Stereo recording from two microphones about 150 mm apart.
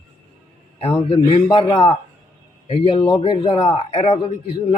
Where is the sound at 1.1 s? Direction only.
35° left (ahead or behind).